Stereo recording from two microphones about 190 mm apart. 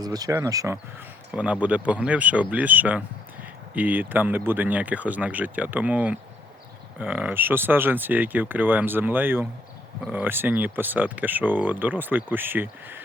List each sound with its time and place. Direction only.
0.0 s speech: 20° right (ahead or behind)
1.3 s speech: 5° right (ahead or behind)